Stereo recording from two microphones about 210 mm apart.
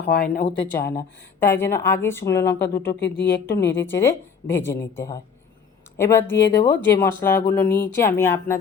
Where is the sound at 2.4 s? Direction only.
50° left (ahead or behind).